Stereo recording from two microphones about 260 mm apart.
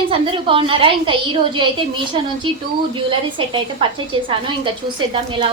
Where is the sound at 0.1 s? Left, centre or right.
Centre.